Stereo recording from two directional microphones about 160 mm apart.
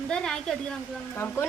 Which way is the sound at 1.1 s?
15° left (ahead or behind).